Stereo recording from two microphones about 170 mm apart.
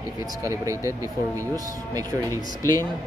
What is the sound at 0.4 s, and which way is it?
Speech, 20° right (ahead or behind).